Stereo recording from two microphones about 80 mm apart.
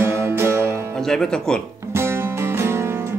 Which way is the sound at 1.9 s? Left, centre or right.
Right.